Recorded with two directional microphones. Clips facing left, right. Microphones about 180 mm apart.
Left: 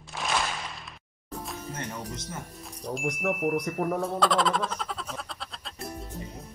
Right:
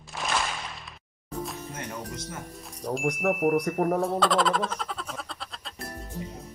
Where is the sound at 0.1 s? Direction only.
Centre (ahead or behind).